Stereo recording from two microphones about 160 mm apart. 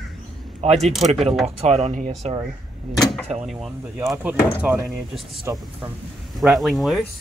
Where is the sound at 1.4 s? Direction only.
40° right (ahead or behind).